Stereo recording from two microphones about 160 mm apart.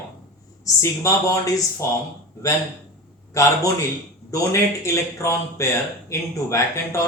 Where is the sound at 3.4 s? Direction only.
20° left (ahead or behind).